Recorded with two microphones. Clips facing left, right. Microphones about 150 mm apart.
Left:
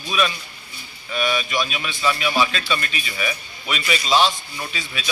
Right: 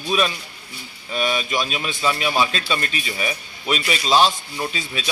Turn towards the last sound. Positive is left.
turn(degrees=-35)  # may be behind; listen again after turning